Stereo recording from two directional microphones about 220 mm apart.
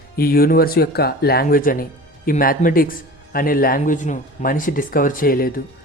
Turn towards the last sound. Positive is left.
turn(degrees=40)  # may be behind; listen again after turning